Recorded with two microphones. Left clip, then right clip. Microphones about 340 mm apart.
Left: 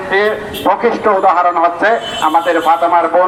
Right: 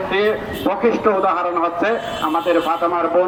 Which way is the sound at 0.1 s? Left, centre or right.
Centre.